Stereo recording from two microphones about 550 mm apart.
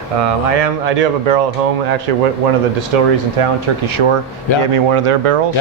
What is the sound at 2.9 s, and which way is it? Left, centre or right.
Speech, right.